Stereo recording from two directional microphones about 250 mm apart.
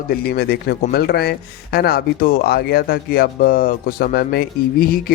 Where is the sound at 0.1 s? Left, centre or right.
Left.